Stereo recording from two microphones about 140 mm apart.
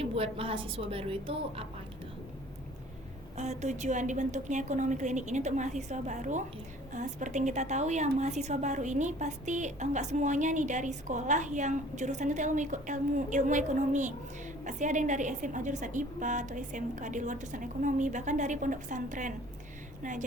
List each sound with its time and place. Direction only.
0.0 s a woman's voice: 45° right (ahead or behind)
3.3 s a woman's voice: 55° right (ahead or behind)